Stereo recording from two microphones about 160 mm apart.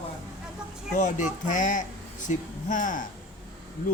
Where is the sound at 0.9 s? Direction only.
50° left (ahead or behind).